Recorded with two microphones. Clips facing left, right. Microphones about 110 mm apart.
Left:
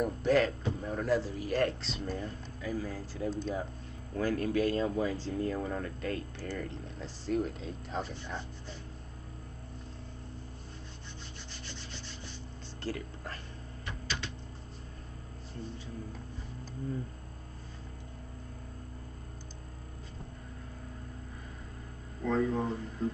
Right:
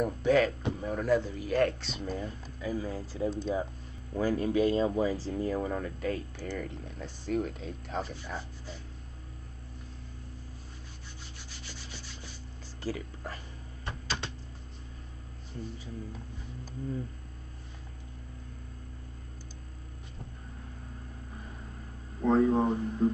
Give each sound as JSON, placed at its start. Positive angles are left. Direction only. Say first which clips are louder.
{"t": 0.0, "sound": "speech", "louder": "right 2 dB", "side_deg": 0}
{"t": 3.3, "sound": "speech", "louder": "right 2 dB", "side_deg": 0}
{"t": 4.1, "sound": "speech", "louder": "right 2 dB", "side_deg": -15}
{"t": 12.8, "sound": "speech", "louder": "right 2 dB", "side_deg": -10}
{"t": 13.8, "sound": "a sound", "louder": "right 3 dB", "side_deg": -30}
{"t": 22.2, "sound": "speech", "louder": "right 6 dB", "side_deg": -35}